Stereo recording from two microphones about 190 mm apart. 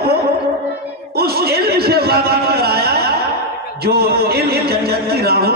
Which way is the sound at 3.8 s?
55° right (ahead or behind).